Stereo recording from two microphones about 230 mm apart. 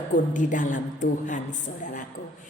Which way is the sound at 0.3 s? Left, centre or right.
Left.